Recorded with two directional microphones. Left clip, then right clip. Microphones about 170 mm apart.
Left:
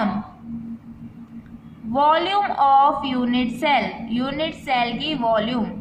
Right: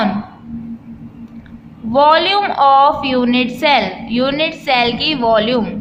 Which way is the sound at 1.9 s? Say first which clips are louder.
Right 7 dB; 15° right (ahead or behind).